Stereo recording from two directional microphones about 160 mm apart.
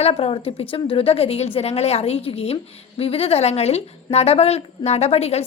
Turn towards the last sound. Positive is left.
turn(degrees=40)  # may be behind; listen again after turning